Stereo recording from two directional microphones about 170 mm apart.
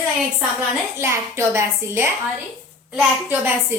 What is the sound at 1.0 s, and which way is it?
A woman's voice, 15° right (ahead or behind).